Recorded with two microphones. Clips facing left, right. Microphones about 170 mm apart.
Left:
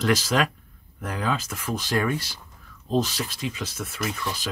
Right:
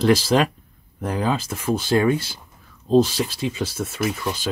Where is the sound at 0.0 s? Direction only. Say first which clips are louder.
Right 5 dB; 30° right (ahead or behind).